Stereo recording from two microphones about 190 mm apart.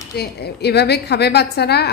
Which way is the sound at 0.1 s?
60° left (ahead or behind).